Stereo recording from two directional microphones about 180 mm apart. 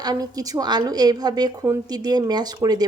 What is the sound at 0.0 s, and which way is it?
A woman's voice, 20° right (ahead or behind).